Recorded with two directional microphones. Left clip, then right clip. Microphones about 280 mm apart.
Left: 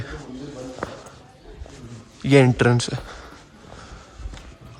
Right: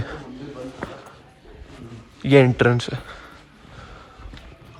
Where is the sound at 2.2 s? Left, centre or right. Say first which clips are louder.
Right 1 dB; centre.